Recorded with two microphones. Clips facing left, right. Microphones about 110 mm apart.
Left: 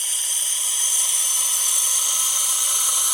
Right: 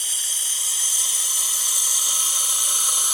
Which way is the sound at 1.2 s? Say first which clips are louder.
Left 2 dB; 10° right (ahead or behind).